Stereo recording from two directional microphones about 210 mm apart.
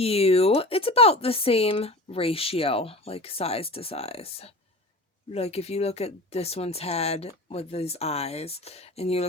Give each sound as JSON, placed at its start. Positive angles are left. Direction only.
{"t": 0.0, "sound": "speech", "side_deg": 30}